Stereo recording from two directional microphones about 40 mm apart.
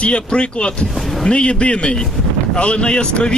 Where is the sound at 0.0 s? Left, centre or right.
Left.